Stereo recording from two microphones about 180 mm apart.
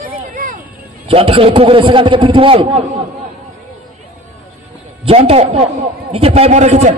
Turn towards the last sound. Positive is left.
turn(degrees=-40)  # may be behind; listen again after turning